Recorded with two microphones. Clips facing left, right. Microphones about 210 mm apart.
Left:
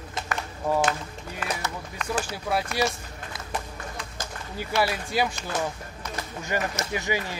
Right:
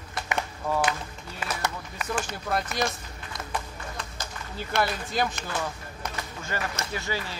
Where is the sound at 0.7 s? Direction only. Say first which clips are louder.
Left 4 dB; 15° left (ahead or behind).